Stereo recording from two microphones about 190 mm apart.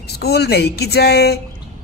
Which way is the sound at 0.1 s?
55° left (ahead or behind).